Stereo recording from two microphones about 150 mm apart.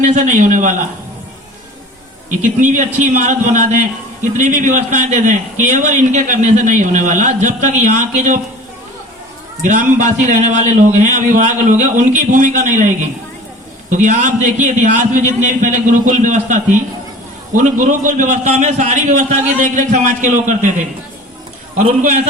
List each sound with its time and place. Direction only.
0.0 s a man's voice: 55° right (ahead or behind)
2.4 s a man's voice: 55° right (ahead or behind)
9.6 s a man's voice: 55° right (ahead or behind)
13.9 s a man's voice: 55° right (ahead or behind)